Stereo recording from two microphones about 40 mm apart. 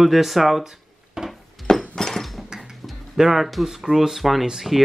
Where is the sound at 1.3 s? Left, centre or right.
Centre.